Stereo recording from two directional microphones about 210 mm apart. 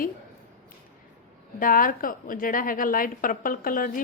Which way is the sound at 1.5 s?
40° left (ahead or behind).